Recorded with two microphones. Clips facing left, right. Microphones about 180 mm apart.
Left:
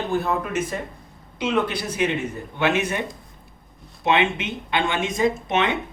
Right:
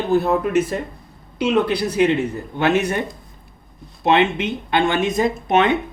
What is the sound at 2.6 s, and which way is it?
Speech, 40° right (ahead or behind).